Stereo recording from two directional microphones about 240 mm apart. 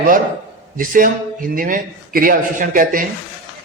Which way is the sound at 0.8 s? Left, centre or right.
Right.